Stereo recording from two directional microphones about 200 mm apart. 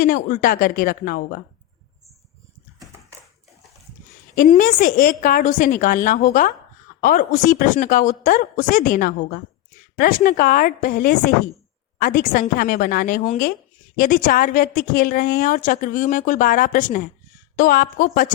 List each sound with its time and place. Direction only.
0.0 s a woman's voice: 45° left (ahead or behind)
4.4 s a woman's voice: 40° left (ahead or behind)